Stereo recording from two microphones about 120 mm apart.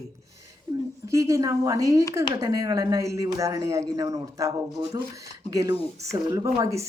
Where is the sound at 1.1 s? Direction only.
25° right (ahead or behind).